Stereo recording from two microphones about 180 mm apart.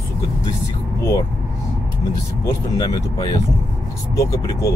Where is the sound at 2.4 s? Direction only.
20° left (ahead or behind).